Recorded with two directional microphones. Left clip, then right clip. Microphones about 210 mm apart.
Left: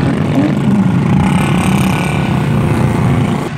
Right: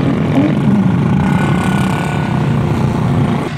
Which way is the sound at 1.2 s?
35° left (ahead or behind).